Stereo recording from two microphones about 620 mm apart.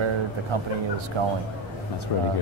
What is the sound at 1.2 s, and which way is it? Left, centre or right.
Speech, right.